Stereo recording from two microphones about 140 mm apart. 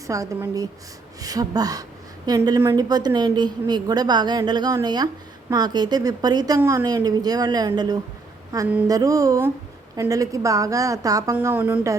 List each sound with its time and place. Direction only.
0.1 s a woman's voice: 20° right (ahead or behind)
11.3 s a woman's voice: 15° right (ahead or behind)